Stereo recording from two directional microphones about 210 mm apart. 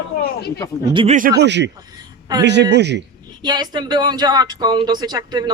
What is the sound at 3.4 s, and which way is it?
A woman's voice, 20° right (ahead or behind).